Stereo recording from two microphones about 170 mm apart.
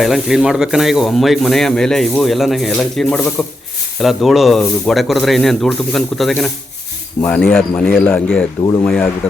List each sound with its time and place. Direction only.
0.0 s a man's voice: centre (ahead or behind)